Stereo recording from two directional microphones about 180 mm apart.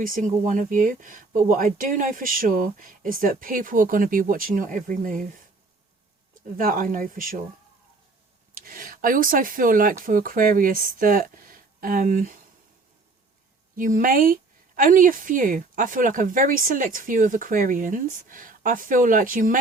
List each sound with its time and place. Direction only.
0.0 s speech: 50° right (ahead or behind)
6.6 s speech: 50° right (ahead or behind)
8.5 s speech: 50° right (ahead or behind)
13.7 s speech: 50° right (ahead or behind)